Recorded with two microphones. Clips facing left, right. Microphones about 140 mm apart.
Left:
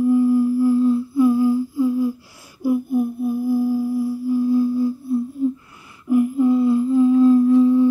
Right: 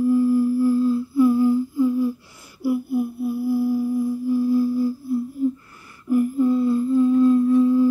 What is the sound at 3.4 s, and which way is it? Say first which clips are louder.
Singing bowl: left 1 dB; 15° left (ahead or behind).